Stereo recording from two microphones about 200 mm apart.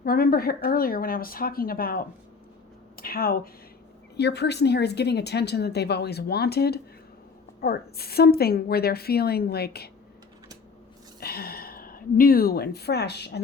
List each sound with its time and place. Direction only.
0.0 s a woman's voice: 50° left (ahead or behind)
4.2 s a woman's voice: 55° left (ahead or behind)
11.2 s a woman's voice: 50° left (ahead or behind)